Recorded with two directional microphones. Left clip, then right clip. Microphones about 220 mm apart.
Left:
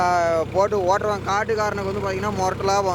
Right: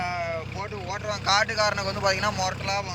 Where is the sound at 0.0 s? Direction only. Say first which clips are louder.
Left 10 dB; 30° left (ahead or behind).